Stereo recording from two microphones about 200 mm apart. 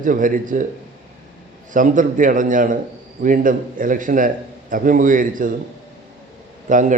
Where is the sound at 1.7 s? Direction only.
40° right (ahead or behind).